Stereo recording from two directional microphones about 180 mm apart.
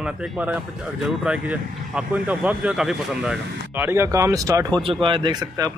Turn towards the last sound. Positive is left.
turn(degrees=-20)  # may be behind; listen again after turning